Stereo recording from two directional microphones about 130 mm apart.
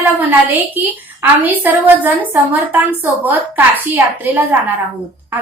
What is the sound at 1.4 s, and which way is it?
A woman's voice, 15° right (ahead or behind).